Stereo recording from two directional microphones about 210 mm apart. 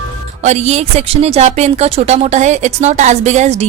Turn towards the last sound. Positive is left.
turn(degrees=-35)  # may be behind; listen again after turning